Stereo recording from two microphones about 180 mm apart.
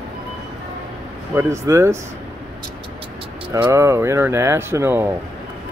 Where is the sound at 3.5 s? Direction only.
15° right (ahead or behind).